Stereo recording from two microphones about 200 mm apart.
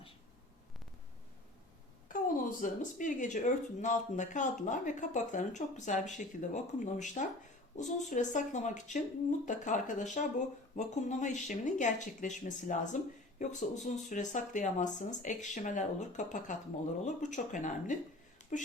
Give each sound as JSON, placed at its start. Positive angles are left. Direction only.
{"t": 2.0, "sound": "speech", "side_deg": 45}